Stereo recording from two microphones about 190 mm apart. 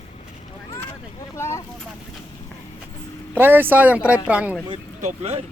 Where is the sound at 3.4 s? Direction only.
10° right (ahead or behind).